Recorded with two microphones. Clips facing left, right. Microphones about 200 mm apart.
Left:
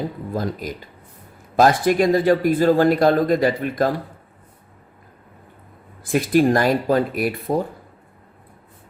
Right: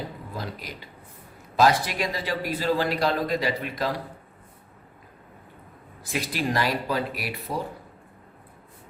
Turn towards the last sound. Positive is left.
turn(degrees=50)  # may be behind; listen again after turning